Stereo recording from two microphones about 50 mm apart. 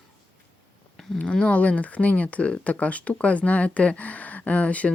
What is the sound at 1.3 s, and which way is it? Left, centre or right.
Speech, left.